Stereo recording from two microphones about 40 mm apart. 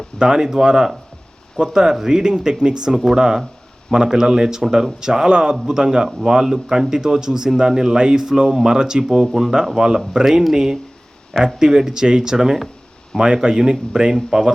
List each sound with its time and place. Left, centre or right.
0.2 s a man's voice: centre